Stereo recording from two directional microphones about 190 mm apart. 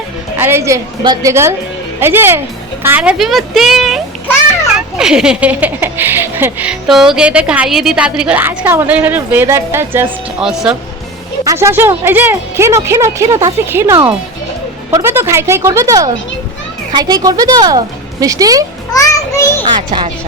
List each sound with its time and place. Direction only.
0.3 s a woman's voice: 10° right (ahead or behind)
11.4 s speech: 15° right (ahead or behind)
18.9 s a child's voice: 15° left (ahead or behind)